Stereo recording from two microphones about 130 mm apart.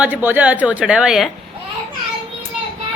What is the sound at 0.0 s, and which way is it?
Speech, 15° right (ahead or behind).